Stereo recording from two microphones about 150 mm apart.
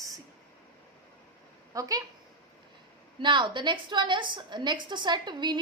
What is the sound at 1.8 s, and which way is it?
Speech, 25° right (ahead or behind).